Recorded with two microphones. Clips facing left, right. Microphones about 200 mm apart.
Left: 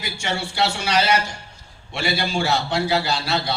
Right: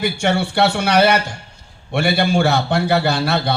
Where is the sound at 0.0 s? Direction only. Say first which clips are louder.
Right 9 dB; 60° right (ahead or behind).